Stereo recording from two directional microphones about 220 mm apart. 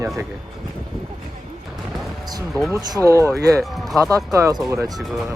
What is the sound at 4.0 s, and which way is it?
Speech, 15° right (ahead or behind).